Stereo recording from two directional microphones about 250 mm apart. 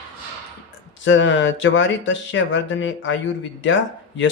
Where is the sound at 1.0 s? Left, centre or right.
Left.